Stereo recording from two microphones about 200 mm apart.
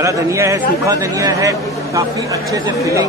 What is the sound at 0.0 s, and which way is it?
A man's voice, 15° right (ahead or behind).